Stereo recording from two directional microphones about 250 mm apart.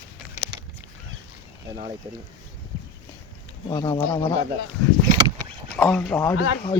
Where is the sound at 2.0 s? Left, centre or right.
Right.